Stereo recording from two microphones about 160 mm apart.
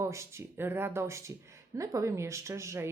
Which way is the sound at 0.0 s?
20° right (ahead or behind).